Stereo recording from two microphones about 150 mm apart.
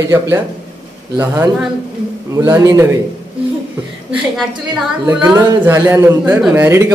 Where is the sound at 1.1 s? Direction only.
15° right (ahead or behind).